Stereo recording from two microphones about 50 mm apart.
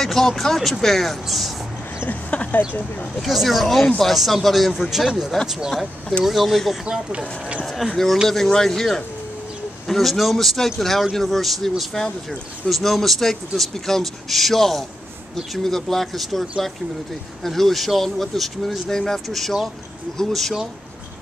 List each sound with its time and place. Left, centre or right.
0.0 s speech: centre
2.0 s speech: left
3.2 s speech: centre
5.7 s speech: centre
6.9 s speech: right
8.3 s speech: centre